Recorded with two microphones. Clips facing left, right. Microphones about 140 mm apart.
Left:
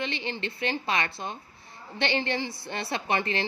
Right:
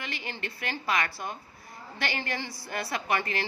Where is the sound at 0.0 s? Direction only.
25° left (ahead or behind).